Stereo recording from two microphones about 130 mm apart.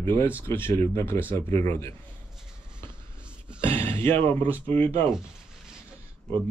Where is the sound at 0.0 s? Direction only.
20° left (ahead or behind).